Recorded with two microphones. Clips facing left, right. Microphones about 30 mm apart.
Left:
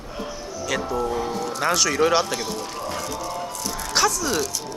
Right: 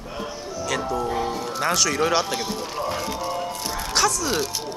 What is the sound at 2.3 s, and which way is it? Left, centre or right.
Music, centre.